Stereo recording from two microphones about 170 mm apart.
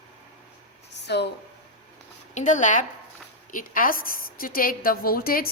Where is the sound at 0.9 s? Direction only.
80° left.